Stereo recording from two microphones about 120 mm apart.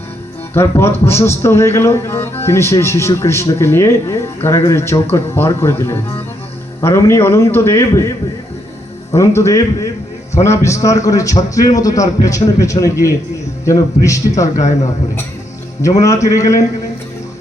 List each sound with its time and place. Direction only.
0.5 s a man's voice: 20° left (ahead or behind)
9.1 s a man's voice: 25° left (ahead or behind)
14.5 s a man's voice: 75° left (ahead or behind)
15.8 s a man's voice: 25° left (ahead or behind)